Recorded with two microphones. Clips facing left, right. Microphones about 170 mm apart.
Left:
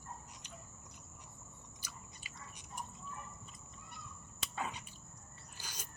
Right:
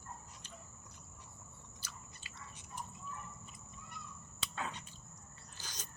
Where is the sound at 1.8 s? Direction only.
15° left (ahead or behind).